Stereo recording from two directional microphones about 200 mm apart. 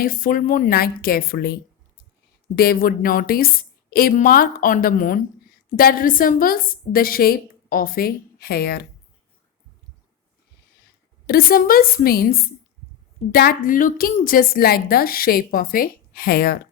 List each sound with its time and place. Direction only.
0.0 s a woman's voice: 45° left (ahead or behind)
2.6 s a woman's voice: 45° left (ahead or behind)
11.3 s a woman's voice: 50° left (ahead or behind)